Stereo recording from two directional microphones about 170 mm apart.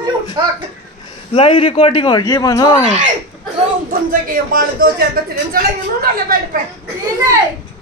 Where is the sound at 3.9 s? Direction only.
55° right (ahead or behind).